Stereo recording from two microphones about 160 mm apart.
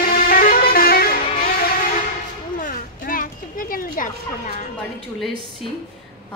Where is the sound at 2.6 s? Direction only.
60° left (ahead or behind).